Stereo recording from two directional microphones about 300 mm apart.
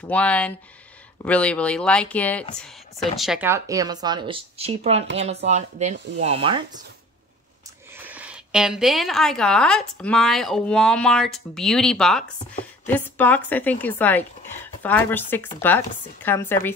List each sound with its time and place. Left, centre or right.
0.1 s a woman's voice: centre
8.0 s a woman's voice: centre